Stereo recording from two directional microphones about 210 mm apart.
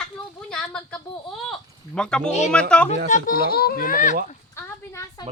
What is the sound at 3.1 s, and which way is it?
Speech, 45° left (ahead or behind).